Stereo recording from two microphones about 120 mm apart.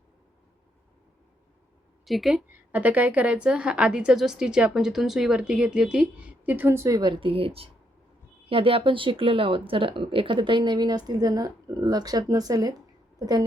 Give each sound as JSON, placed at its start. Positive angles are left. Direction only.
{"t": 2.0, "sound": "a woman's voice", "side_deg": 0}
{"t": 2.7, "sound": "a woman's voice", "side_deg": -15}